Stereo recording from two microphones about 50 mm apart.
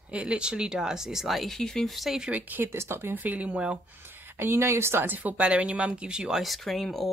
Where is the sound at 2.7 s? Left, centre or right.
Right.